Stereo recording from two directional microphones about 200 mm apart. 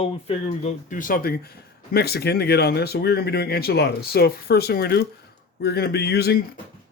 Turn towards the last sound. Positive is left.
turn(degrees=50)  # may be behind; listen again after turning